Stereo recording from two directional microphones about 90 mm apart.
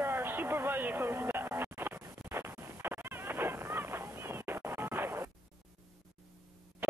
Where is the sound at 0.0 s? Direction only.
25° right (ahead or behind).